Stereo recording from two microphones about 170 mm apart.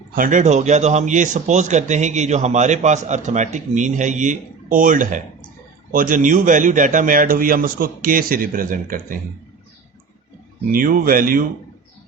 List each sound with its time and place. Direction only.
0.1 s a man's voice: 50° right (ahead or behind)
10.7 s speech: 55° right (ahead or behind)